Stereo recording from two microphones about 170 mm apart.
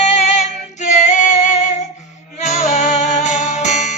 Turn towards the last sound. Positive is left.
turn(degrees=45)  # may be behind; listen again after turning